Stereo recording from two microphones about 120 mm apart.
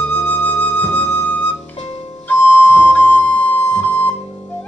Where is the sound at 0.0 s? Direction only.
15° left (ahead or behind).